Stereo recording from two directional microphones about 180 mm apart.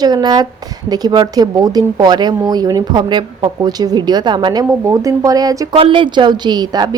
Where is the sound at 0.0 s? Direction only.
20° right (ahead or behind).